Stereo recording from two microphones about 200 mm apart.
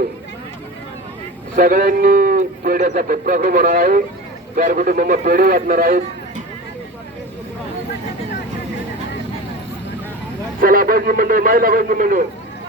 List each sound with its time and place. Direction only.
1.5 s a man's voice: 45° right (ahead or behind)
10.6 s a man's voice: 45° right (ahead or behind)